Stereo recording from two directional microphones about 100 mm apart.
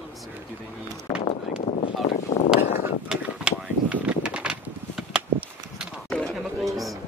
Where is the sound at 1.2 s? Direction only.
65° left (ahead or behind).